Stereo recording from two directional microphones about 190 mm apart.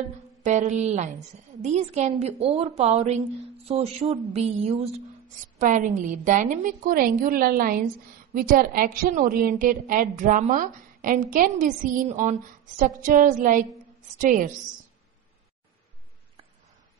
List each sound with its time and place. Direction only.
0.4 s a woman's voice: 40° right (ahead or behind)